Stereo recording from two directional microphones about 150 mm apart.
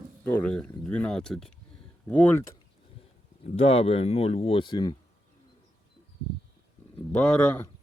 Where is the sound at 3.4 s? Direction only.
40° left (ahead or behind).